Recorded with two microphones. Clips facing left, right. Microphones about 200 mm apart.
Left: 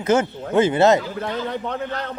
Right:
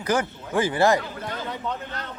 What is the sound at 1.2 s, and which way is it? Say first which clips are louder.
Speech: left 6 dB; 60° left (ahead or behind).